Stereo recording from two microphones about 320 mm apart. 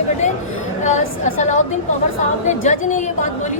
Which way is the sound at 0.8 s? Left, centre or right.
Left.